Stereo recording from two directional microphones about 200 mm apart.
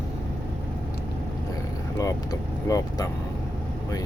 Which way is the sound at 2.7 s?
15° left (ahead or behind).